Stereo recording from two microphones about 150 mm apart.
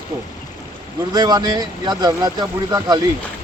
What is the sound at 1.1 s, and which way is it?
Speech, 30° right (ahead or behind).